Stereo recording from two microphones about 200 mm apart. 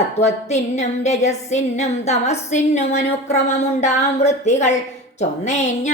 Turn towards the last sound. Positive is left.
turn(degrees=35)  # may be behind; listen again after turning